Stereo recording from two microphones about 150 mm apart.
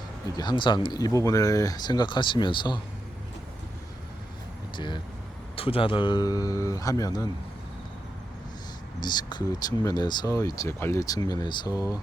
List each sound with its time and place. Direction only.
0.3 s speech: 30° left (ahead or behind)
5.5 s speech: 40° left (ahead or behind)
9.0 s speech: 30° left (ahead or behind)